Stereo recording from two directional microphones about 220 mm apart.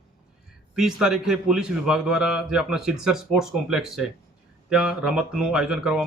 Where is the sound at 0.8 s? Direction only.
Centre (ahead or behind).